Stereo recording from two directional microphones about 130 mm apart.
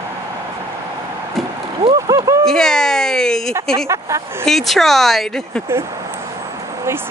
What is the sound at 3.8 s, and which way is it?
Speech, 20° right (ahead or behind).